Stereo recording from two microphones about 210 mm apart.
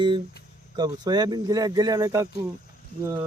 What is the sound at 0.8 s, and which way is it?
Speech, 20° right (ahead or behind).